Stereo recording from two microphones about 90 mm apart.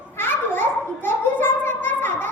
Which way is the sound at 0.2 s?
25° left (ahead or behind).